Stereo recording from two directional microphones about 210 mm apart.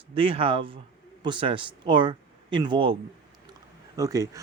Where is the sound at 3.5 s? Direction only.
15° right (ahead or behind).